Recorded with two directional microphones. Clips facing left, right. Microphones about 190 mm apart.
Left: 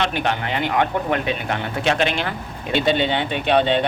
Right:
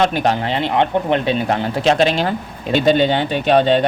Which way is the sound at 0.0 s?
40° right (ahead or behind).